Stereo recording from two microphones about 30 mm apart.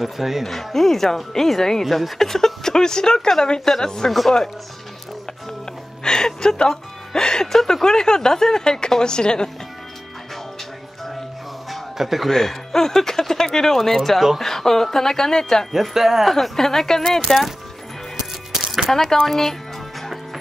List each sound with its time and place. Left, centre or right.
0.0 s speech: centre
0.7 s speech: centre
1.9 s speech: centre
2.1 s a woman's voice: centre
6.0 s a woman's voice: left
7.5 s a woman's voice: centre
11.7 s music: centre
12.3 s speech: centre
13.7 s speech: centre
15.7 s speech: centre
16.3 s speech: centre
18.9 s speech: centre